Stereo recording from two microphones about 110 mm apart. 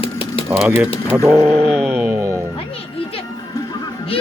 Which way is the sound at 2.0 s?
10° right (ahead or behind).